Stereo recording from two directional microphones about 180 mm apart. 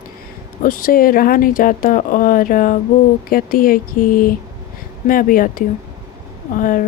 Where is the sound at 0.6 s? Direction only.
50° left (ahead or behind).